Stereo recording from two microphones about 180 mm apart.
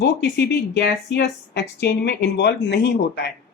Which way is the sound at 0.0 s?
70° left (ahead or behind).